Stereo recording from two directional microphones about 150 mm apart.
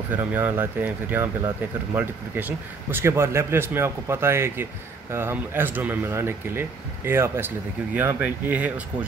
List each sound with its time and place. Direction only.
0.1 s a man's voice: 10° right (ahead or behind)